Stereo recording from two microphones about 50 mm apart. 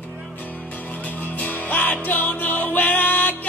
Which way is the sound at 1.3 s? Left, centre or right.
Left.